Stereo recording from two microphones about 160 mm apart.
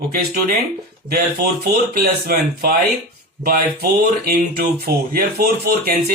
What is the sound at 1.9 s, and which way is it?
Speech, 70° right (ahead or behind).